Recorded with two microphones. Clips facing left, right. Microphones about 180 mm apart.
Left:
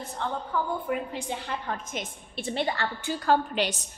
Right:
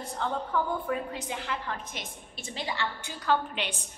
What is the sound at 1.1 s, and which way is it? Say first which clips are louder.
Speech: left 2 dB; 30° left (ahead or behind).